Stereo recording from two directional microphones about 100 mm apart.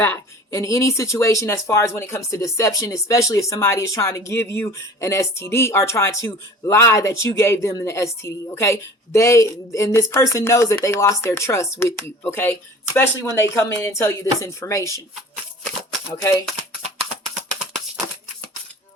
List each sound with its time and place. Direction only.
0.0 s speech: 25° left (ahead or behind)
16.0 s speech: 25° left (ahead or behind)